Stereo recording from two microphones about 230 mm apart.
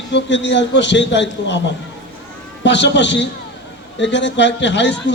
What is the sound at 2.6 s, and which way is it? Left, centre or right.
A man's voice, left.